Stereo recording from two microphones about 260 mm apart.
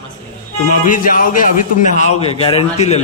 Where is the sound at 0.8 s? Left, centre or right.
Left.